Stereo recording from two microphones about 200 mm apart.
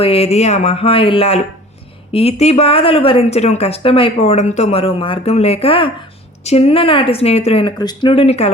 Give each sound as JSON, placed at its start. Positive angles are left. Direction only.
{"t": 0.0, "sound": "speech", "side_deg": 30}